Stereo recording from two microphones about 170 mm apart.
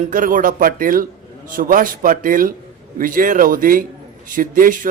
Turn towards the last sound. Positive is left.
turn(degrees=-50)  # may be behind; listen again after turning